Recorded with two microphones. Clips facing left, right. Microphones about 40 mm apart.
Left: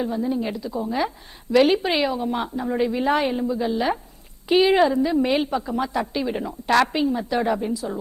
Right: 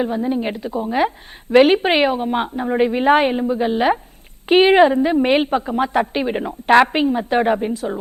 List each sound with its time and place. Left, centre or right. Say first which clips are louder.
0.0 s a woman's voice: right 4 dB; right